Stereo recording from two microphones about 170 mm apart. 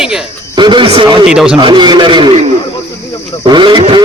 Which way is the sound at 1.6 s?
25° right (ahead or behind).